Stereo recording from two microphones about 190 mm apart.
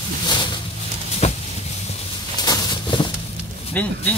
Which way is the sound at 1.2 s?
35° left (ahead or behind).